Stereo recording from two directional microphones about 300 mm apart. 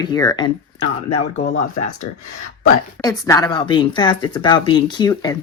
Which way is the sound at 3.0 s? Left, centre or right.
Centre.